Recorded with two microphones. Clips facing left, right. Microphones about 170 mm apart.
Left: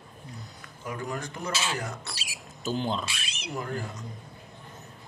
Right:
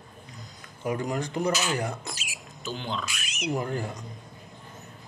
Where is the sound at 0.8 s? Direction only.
20° right (ahead or behind).